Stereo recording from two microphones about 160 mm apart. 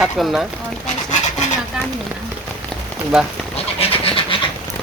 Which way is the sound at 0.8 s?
45° left (ahead or behind).